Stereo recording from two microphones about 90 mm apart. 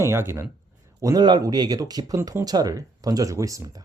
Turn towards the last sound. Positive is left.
turn(degrees=-40)  # may be behind; listen again after turning